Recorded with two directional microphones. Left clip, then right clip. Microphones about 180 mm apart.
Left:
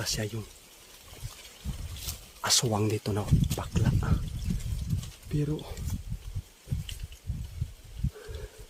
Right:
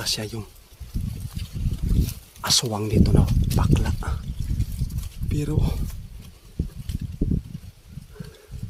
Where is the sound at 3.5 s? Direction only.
15° right (ahead or behind).